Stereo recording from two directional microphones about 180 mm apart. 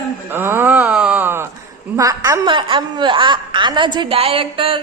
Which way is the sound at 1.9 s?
20° right (ahead or behind).